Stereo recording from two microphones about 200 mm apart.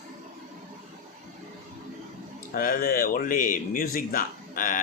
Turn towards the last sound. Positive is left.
turn(degrees=45)  # may be behind; listen again after turning